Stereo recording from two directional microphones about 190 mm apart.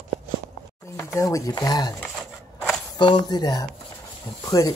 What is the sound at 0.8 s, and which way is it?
Speech, 15° left (ahead or behind).